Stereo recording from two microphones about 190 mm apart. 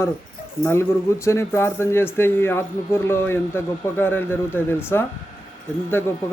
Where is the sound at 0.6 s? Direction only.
15° left (ahead or behind).